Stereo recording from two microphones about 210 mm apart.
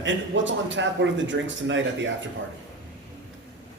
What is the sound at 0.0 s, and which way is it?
A man's voice, 60° right (ahead or behind).